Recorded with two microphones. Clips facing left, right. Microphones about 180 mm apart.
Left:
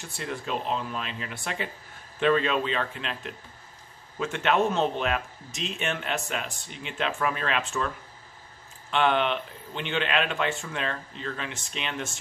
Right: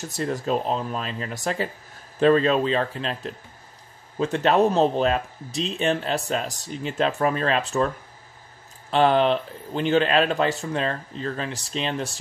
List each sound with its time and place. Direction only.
0.0 s speech: 40° right (ahead or behind)
8.9 s speech: 35° right (ahead or behind)